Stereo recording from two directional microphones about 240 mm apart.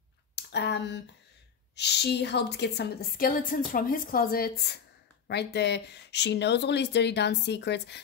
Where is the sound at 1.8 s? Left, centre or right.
Left.